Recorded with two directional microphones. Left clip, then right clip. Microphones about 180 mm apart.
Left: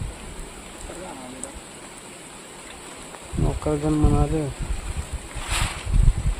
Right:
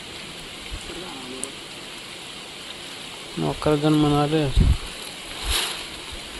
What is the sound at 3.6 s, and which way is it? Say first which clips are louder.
Speech: right 4 dB; 25° right (ahead or behind).